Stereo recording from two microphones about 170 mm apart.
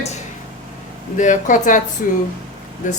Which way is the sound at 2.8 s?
45° left (ahead or behind).